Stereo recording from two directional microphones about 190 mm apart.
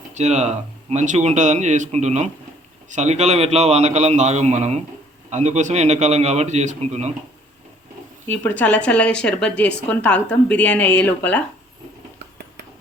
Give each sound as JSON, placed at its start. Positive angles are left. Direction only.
{"t": 0.1, "sound": "speech", "side_deg": -35}
{"t": 8.3, "sound": "a woman's voice", "side_deg": 10}